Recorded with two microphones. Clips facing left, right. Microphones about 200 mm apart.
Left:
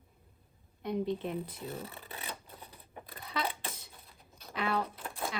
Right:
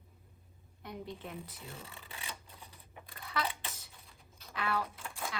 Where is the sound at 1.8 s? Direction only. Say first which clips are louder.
Left 6 dB; 30° left (ahead or behind).